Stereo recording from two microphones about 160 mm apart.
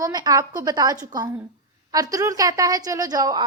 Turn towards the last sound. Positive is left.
turn(degrees=-25)  # may be behind; listen again after turning